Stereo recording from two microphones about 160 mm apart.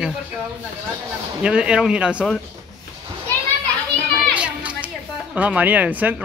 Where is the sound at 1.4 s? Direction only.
5° right (ahead or behind).